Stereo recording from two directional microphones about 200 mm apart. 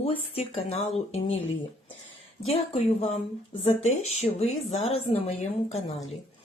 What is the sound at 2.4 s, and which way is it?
Speech, 30° left (ahead or behind).